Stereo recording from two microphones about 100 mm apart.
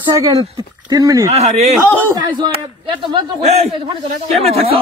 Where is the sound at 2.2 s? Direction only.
50° right (ahead or behind).